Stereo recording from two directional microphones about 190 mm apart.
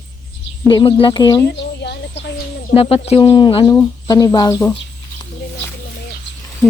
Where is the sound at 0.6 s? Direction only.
25° left (ahead or behind).